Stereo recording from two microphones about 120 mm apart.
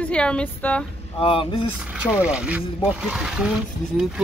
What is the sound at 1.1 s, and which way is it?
Speech, 45° left (ahead or behind).